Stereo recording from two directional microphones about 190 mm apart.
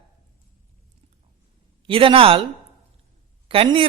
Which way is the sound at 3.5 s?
30° right (ahead or behind).